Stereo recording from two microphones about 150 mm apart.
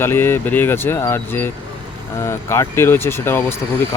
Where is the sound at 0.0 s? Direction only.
15° left (ahead or behind).